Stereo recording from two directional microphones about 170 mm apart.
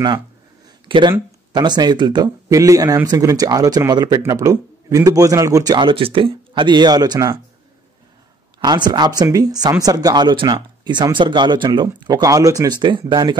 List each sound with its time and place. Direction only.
0.8 s speech: 30° right (ahead or behind)
8.5 s speech: 25° right (ahead or behind)